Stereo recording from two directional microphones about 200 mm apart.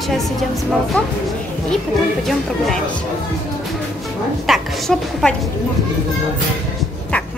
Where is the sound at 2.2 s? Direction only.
Centre (ahead or behind).